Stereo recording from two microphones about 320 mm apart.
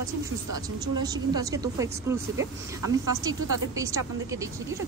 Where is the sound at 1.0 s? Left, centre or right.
Centre.